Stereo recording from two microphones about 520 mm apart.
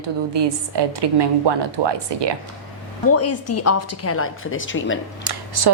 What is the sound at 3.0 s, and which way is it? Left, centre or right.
A woman's voice, left.